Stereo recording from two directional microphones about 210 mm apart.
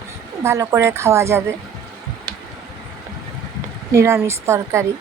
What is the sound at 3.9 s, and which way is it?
Speech, 15° right (ahead or behind).